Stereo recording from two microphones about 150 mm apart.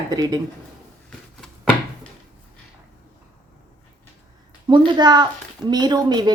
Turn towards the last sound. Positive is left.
turn(degrees=-30)  # may be behind; listen again after turning